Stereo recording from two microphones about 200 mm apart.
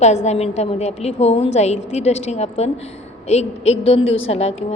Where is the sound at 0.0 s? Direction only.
35° left (ahead or behind).